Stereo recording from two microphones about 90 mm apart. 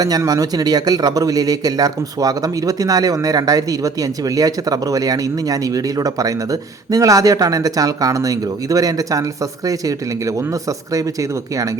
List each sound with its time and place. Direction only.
0.3 s speech: 45° right (ahead or behind)